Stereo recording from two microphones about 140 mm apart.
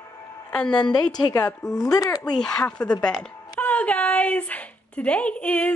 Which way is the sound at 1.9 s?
25° left (ahead or behind).